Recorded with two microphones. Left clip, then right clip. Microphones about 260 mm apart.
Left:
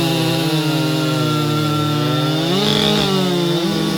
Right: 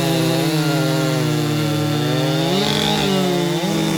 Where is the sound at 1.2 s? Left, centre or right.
Centre.